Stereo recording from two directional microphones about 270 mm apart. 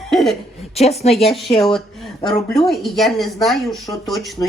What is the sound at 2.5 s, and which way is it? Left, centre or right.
Speech, centre.